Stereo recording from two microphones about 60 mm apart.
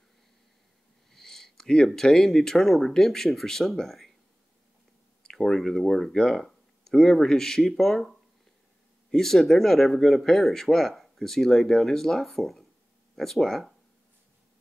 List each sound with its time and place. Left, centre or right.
1.1 s a sound: centre
2.0 s speech: centre
5.2 s speech: centre